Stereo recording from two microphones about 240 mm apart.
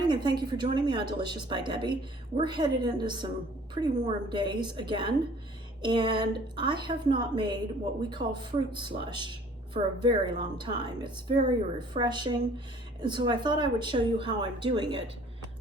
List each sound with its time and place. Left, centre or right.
0.0 s a woman's voice: centre